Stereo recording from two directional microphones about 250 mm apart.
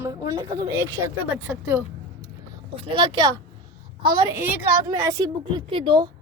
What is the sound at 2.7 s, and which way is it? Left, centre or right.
Speech, right.